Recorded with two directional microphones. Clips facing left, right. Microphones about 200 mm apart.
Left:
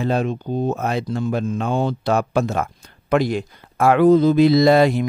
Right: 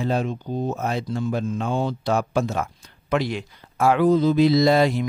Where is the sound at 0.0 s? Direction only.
65° left (ahead or behind).